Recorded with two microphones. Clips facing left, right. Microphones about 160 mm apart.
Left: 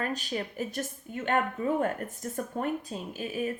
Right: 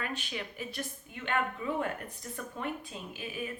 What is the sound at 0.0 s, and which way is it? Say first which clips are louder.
A woman's voice: left 6 dB; 40° left (ahead or behind).